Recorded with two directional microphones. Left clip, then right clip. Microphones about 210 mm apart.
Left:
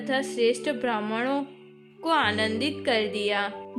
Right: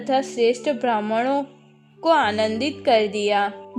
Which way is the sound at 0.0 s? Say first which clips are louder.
Right 5 dB; 25° right (ahead or behind).